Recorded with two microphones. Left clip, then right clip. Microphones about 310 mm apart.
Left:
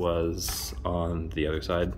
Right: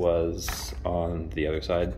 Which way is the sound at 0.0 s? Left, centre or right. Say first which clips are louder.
Right 3 dB; left.